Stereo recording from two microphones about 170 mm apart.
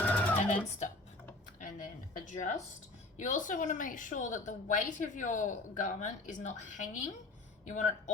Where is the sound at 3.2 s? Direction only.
50° left (ahead or behind).